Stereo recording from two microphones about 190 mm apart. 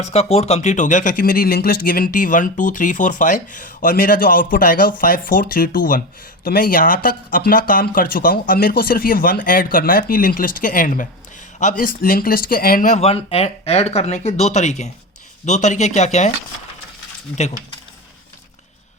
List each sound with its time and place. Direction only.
0.0 s speech: 35° left (ahead or behind)